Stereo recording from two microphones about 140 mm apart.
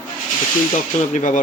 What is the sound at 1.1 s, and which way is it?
Speech, 65° left (ahead or behind).